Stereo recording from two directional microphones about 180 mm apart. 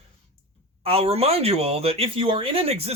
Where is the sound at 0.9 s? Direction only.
35° right (ahead or behind).